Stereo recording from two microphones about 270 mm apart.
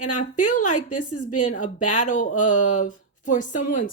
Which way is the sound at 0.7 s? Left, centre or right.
Left.